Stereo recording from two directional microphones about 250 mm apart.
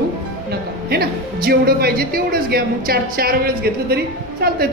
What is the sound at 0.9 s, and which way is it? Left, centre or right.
Speech, right.